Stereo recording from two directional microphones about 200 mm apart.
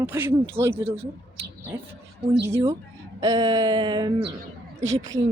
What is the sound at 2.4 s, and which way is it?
Speech, 15° right (ahead or behind).